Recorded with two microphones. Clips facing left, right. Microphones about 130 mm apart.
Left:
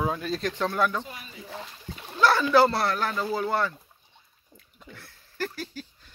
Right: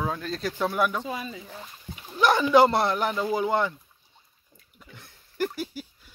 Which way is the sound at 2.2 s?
20° right (ahead or behind).